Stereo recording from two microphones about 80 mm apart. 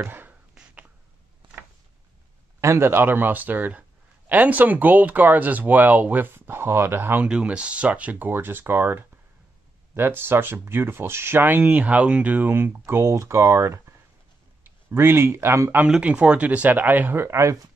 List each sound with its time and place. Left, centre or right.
0.0 s a sound: right
2.6 s speech: right
7.2 s speech: centre; by 15.7 s right
15.9 s speech: centre; by 17.6 s right